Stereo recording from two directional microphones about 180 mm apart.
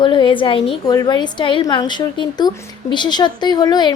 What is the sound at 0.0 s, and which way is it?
Speech, 25° left (ahead or behind).